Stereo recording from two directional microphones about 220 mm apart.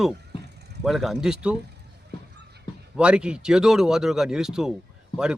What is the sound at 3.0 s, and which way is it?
Speech, 5° right (ahead or behind).